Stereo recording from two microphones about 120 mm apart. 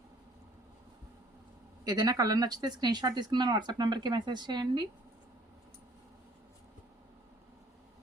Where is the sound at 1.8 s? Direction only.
35° right (ahead or behind).